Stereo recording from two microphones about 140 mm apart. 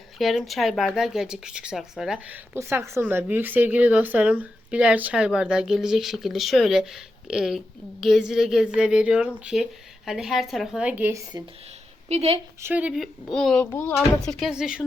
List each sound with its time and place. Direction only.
0.2 s speech: centre (ahead or behind)
12.0 s a woman's voice: 50° right (ahead or behind)
12.6 s speech: 10° right (ahead or behind)
13.3 s speech: 5° left (ahead or behind)
13.6 s speech: 15° left (ahead or behind)
14.3 s speech: centre (ahead or behind)